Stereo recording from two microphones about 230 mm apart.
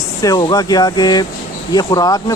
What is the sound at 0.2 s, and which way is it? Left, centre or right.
Speech, centre.